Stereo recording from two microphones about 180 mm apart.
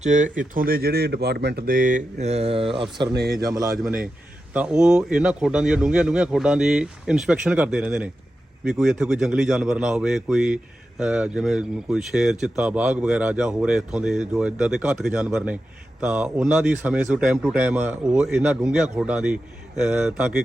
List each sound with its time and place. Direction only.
0.0 s speech: 45° right (ahead or behind)
3.4 s speech: 20° right (ahead or behind)
4.5 s a man's voice: 5° right (ahead or behind)